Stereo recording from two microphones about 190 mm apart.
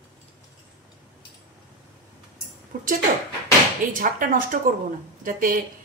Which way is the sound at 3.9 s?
45° right (ahead or behind).